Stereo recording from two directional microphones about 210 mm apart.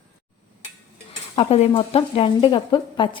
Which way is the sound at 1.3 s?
25° left (ahead or behind).